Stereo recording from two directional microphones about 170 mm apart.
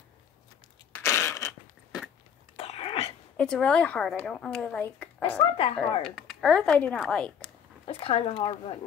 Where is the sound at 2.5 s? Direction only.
35° left (ahead or behind).